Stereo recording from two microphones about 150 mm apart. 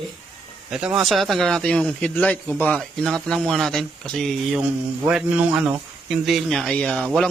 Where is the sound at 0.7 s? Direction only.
5° right (ahead or behind).